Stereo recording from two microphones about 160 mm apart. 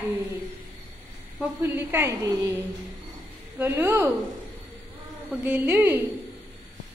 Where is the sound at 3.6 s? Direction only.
15° right (ahead or behind).